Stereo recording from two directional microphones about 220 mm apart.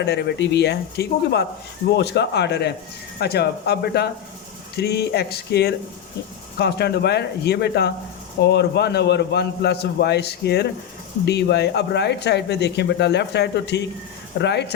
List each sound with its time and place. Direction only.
0.0 s speech: 50° left (ahead or behind)